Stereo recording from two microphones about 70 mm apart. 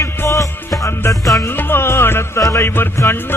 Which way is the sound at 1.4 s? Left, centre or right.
Left.